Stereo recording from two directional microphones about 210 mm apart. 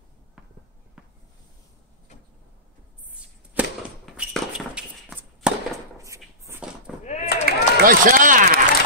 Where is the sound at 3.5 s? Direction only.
5° right (ahead or behind).